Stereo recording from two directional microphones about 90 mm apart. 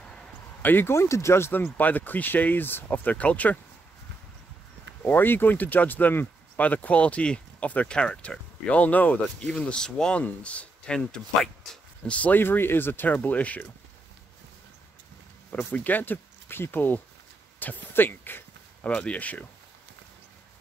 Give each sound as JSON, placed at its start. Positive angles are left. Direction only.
{"t": 0.6, "sound": "speech", "side_deg": 20}
{"t": 5.0, "sound": "speech", "side_deg": 25}
{"t": 15.5, "sound": "speech", "side_deg": 20}